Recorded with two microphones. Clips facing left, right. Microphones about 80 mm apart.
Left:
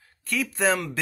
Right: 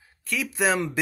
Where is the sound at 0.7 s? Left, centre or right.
Centre.